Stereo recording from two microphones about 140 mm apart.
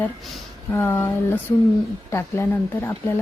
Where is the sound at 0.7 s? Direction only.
20° left (ahead or behind).